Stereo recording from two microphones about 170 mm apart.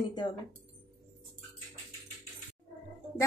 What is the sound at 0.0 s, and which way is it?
Speech, 25° left (ahead or behind).